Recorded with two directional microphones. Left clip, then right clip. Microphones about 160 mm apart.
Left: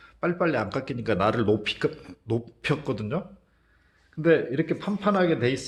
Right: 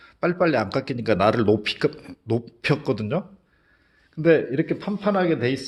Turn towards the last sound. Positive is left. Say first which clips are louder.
# right 1 dB
turn(degrees=-30)  # may be behind; listen again after turning